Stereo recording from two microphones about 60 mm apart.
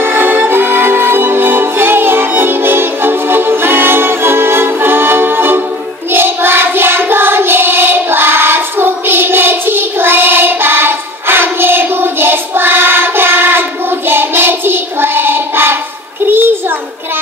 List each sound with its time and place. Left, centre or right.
0.0 s music: right
6.1 s child singing: right
16.3 s a sound: right